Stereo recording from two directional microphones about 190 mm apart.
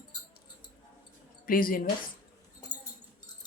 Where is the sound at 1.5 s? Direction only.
50° left (ahead or behind).